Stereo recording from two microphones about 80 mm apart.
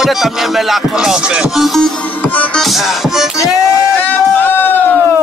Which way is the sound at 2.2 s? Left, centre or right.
Centre.